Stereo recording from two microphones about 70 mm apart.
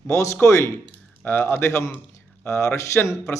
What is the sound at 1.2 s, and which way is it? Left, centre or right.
Speech, left.